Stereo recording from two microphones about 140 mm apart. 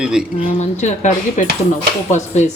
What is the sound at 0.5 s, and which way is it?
Speech, 55° left (ahead or behind).